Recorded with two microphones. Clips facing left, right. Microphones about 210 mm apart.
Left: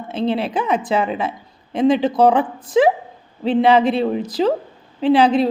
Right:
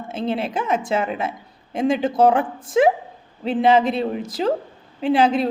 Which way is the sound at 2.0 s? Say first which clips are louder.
Left 2 dB; 50° right (ahead or behind).